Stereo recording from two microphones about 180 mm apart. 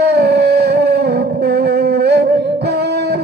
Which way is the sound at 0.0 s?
65° right (ahead or behind).